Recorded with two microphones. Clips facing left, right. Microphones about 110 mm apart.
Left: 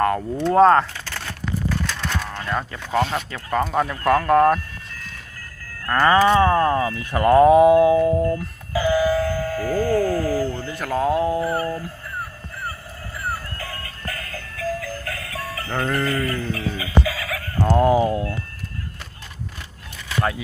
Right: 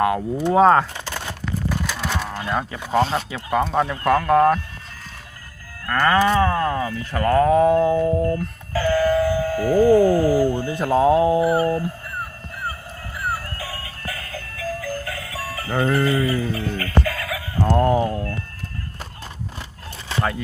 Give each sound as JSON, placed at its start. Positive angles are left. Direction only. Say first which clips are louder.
{"t": 0.0, "sound": "speech", "louder": "even", "side_deg": -10}
{"t": 0.9, "sound": "a sound", "louder": "right 3 dB", "side_deg": -20}
{"t": 1.9, "sound": "livestock", "louder": "right 2 dB", "side_deg": -10}
{"t": 3.0, "sound": "speech", "louder": "right 2 dB", "side_deg": -30}
{"t": 3.2, "sound": "speech", "louder": "right 2 dB", "side_deg": -10}
{"t": 3.6, "sound": "speech", "louder": "even", "side_deg": 5}
{"t": 5.9, "sound": "speech", "louder": "left 2 dB", "side_deg": 10}
{"t": 6.4, "sound": "speech", "louder": "left 3 dB", "side_deg": 25}
{"t": 6.8, "sound": "speech", "louder": "left 3 dB", "side_deg": 15}
{"t": 8.3, "sound": "a sound", "louder": "even", "side_deg": 15}
{"t": 9.3, "sound": "speech", "louder": "right 4 dB", "side_deg": -15}
{"t": 13.6, "sound": "music", "louder": "right 1 dB", "side_deg": -5}
{"t": 17.7, "sound": "speech", "louder": "left 1 dB", "side_deg": 5}
{"t": 18.0, "sound": "speech", "louder": "left 2 dB", "side_deg": 20}